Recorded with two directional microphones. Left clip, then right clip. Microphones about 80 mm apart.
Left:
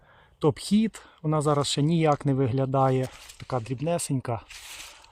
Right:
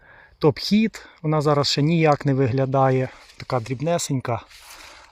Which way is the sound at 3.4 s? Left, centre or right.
Right.